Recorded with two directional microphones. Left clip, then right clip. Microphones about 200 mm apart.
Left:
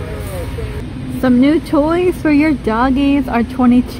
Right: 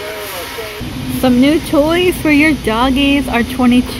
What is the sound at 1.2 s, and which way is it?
Speech, 15° left (ahead or behind).